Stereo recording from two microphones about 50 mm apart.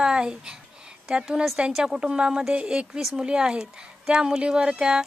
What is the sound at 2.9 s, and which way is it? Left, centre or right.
Speech, centre.